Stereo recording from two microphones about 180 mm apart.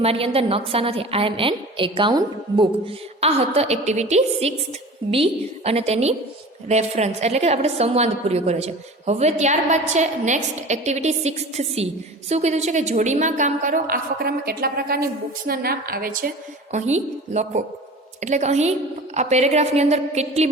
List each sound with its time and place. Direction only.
0.0 s a woman's voice: 35° right (ahead or behind); by 16.3 s 55° right (ahead or behind)
16.7 s a woman's voice: 40° right (ahead or behind)